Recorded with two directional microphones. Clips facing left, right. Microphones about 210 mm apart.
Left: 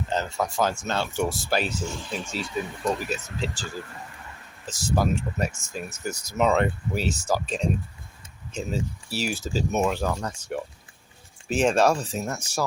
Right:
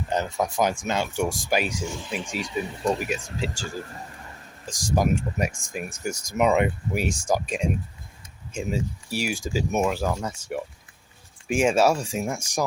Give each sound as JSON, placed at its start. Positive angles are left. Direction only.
{"t": 0.1, "sound": "speech", "side_deg": -15}
{"t": 2.8, "sound": "speech", "side_deg": -25}
{"t": 3.4, "sound": "speech", "side_deg": -10}